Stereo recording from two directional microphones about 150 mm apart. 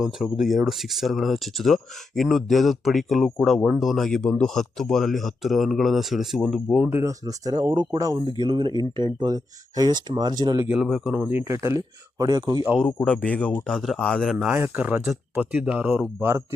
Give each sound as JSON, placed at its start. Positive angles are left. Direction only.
{"t": 0.0, "sound": "speech", "side_deg": -5}
{"t": 6.8, "sound": "speech", "side_deg": -15}
{"t": 10.8, "sound": "speech", "side_deg": 5}
{"t": 11.1, "sound": "speech", "side_deg": -15}
{"t": 12.8, "sound": "speech", "side_deg": 10}
{"t": 14.5, "sound": "speech", "side_deg": -10}